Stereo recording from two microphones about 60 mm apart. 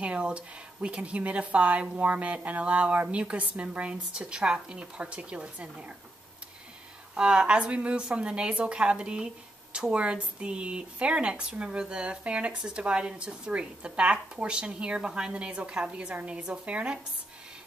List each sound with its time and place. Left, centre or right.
0.0 s speech: centre
7.2 s a woman's voice: centre